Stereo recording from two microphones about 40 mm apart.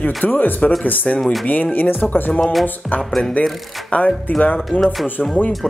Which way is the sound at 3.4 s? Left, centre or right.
Left.